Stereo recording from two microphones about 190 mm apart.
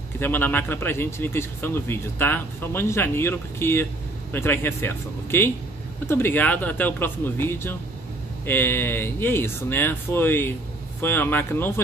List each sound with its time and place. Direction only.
0.2 s speech: 10° left (ahead or behind)